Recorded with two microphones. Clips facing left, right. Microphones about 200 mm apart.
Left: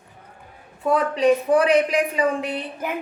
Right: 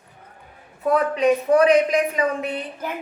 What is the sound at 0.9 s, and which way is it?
A woman's voice, 30° left (ahead or behind).